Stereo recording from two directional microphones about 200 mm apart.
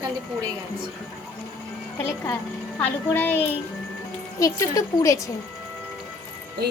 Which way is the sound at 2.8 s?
10° left (ahead or behind).